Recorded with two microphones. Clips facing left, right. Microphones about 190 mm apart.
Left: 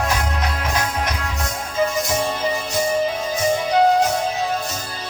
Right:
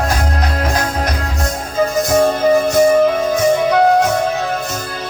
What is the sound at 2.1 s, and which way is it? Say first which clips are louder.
Music: right 10 dB; 45° right (ahead or behind).